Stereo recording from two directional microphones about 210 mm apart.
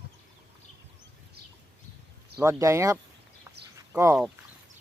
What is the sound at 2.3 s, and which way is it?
Speech, 15° right (ahead or behind).